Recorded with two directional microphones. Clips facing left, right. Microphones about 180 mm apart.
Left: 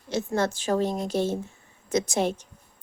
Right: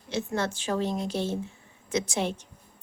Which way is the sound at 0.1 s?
40° left (ahead or behind).